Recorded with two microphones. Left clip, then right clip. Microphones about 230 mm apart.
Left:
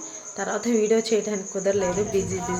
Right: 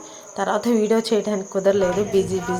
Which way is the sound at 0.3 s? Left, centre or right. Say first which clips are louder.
Right 4 dB; centre.